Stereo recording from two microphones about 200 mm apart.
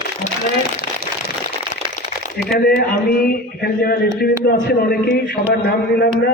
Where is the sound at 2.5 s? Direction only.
50° left (ahead or behind).